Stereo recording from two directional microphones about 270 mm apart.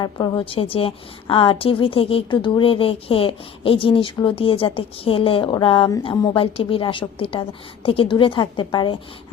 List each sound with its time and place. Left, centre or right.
0.0 s a woman's voice: centre